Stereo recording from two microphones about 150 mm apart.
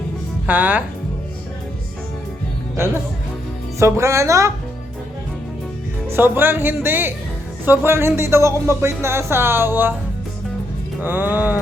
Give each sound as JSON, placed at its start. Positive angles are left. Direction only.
{"t": 0.4, "sound": "music", "side_deg": -10}
{"t": 2.7, "sound": "music", "side_deg": -15}
{"t": 3.8, "sound": "speech", "side_deg": -20}
{"t": 6.1, "sound": "music", "side_deg": -15}
{"t": 11.0, "sound": "music", "side_deg": -10}